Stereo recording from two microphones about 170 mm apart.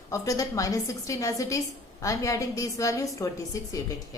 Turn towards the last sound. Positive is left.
turn(degrees=20)  # may be behind; listen again after turning